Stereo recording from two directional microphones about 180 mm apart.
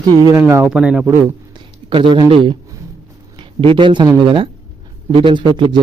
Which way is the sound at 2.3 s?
30° right (ahead or behind).